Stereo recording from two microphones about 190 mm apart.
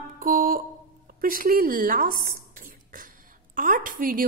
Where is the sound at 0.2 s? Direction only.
45° right (ahead or behind).